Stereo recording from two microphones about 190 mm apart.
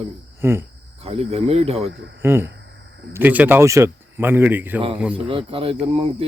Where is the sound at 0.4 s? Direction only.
10° right (ahead or behind).